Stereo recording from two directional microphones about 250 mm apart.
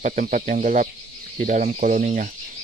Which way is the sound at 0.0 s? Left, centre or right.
Right.